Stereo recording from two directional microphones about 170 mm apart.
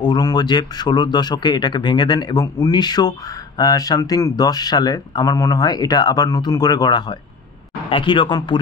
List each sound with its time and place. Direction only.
0.0 s speech: 25° left (ahead or behind)